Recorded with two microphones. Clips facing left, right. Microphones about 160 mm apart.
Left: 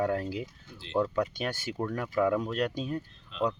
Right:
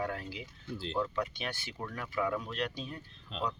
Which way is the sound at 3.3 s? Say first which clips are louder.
Left 7 dB; 40° right (ahead or behind).